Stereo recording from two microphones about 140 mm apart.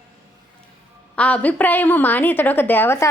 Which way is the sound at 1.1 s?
10° left (ahead or behind).